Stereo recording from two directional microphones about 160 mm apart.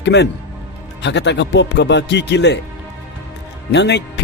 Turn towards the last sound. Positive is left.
turn(degrees=90)